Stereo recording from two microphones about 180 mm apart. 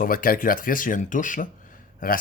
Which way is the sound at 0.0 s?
50° left (ahead or behind).